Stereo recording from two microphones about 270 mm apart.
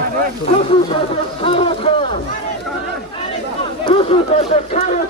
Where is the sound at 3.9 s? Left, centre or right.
Left.